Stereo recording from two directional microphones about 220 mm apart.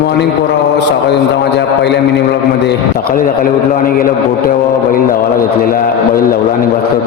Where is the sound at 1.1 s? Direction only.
50° left (ahead or behind).